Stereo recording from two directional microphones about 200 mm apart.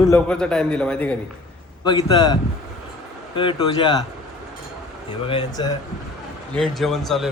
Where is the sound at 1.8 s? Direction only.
20° left (ahead or behind).